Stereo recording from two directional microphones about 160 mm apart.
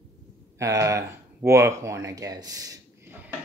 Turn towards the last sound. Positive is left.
turn(degrees=-15)  # may be behind; listen again after turning